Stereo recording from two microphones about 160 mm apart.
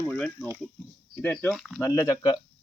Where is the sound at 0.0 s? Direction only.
10° left (ahead or behind).